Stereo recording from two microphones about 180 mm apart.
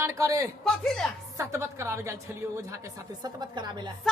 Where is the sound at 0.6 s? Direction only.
5° left (ahead or behind).